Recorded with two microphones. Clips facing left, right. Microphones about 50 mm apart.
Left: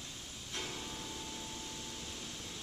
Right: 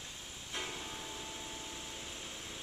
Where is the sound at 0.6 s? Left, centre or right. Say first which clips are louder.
Right 1 dB; centre.